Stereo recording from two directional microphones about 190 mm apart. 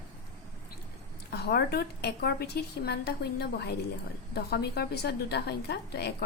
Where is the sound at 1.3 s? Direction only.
60° left (ahead or behind).